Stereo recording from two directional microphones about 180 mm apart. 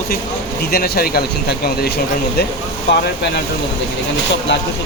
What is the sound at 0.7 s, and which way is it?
Speech, 55° left (ahead or behind).